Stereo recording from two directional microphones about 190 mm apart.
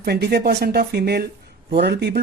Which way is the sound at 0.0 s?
55° right (ahead or behind).